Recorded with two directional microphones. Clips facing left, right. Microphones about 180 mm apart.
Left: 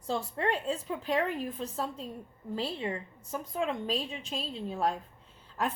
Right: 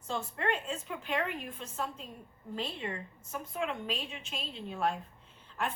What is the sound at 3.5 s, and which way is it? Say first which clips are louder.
Speech: left 4 dB; 35° left (ahead or behind).